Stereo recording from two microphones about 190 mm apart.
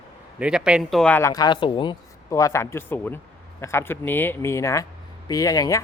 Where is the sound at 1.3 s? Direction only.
20° left (ahead or behind).